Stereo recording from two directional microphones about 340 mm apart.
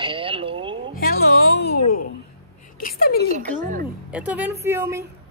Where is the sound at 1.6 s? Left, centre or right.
Left.